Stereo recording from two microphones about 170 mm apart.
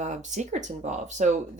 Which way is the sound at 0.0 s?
45° right (ahead or behind).